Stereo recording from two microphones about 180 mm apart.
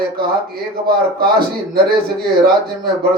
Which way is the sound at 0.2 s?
60° right (ahead or behind).